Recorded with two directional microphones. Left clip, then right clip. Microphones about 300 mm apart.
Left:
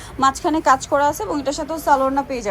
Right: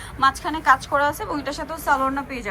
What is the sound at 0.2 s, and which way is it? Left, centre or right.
A woman's voice, left.